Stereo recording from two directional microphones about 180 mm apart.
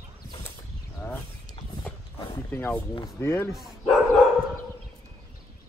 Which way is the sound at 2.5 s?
10° left (ahead or behind).